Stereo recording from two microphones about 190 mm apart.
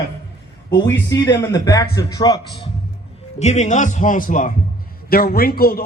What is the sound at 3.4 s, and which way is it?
A man's voice, 35° left (ahead or behind).